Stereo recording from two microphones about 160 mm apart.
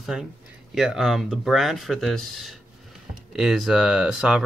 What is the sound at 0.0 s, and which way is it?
Speech, 5° right (ahead or behind).